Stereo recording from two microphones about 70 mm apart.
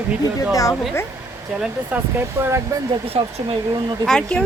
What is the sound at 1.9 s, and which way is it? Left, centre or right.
Speech, right.